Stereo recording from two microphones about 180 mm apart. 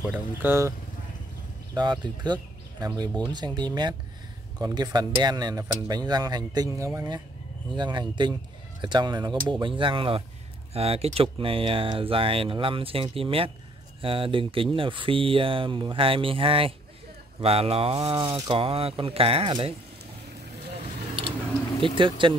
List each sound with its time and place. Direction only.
0.0 s speech: 10° right (ahead or behind); by 19.7 s 30° right (ahead or behind)
21.8 s speech: 30° right (ahead or behind)